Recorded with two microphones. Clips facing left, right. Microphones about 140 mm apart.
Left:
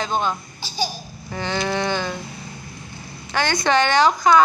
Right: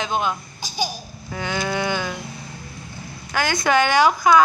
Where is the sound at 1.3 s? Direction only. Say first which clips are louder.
Left 1 dB; 5° right (ahead or behind).